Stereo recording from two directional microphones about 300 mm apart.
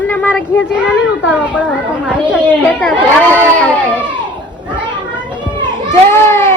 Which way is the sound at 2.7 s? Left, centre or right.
Centre.